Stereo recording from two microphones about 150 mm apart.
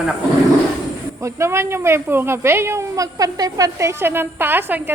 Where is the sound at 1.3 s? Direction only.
20° right (ahead or behind).